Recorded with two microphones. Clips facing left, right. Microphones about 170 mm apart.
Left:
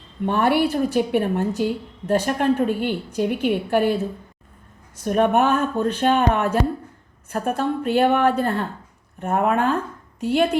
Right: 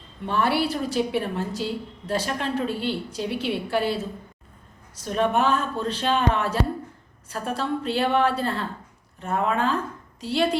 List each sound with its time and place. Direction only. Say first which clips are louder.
0.3 s a woman's voice: left 4 dB; 55° left (ahead or behind)
5.0 s a woman's voice: left 4 dB; 55° left (ahead or behind)